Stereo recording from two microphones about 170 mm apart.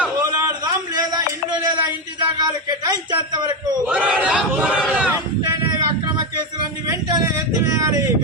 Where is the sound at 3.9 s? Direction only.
10° right (ahead or behind).